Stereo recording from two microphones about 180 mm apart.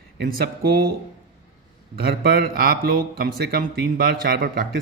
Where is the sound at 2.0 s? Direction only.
55° right (ahead or behind).